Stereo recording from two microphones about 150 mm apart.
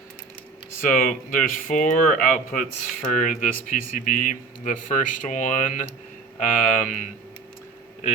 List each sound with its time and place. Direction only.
0.8 s speech: 65° left (ahead or behind)